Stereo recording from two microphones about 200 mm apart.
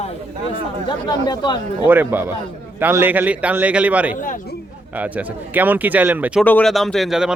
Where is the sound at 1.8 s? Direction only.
10° right (ahead or behind).